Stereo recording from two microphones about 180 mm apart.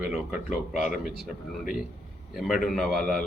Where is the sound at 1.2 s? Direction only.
50° left (ahead or behind).